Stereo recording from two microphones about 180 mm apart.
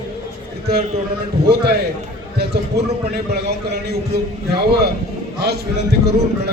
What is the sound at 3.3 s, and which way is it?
A man's voice, 65° right (ahead or behind).